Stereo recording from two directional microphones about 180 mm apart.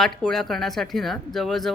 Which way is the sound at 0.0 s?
Centre (ahead or behind).